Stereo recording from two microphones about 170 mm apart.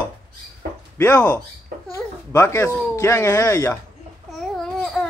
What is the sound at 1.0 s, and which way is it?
Speech, 10° left (ahead or behind).